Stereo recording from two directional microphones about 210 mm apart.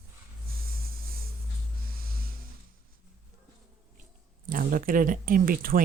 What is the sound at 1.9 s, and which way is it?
Music, 45° right (ahead or behind).